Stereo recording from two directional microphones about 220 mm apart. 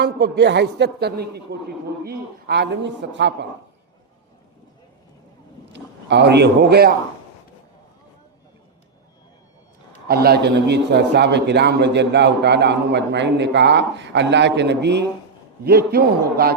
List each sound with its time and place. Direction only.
0.0 s a man's voice: 50° right (ahead or behind)
5.7 s a man's voice: 50° right (ahead or behind)
10.1 s a man's voice: 45° right (ahead or behind)